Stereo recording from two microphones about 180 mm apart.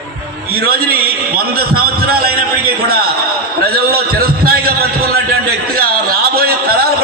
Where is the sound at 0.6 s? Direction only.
55° right (ahead or behind).